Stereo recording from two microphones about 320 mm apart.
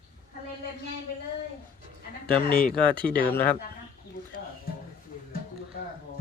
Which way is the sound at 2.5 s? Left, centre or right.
Left.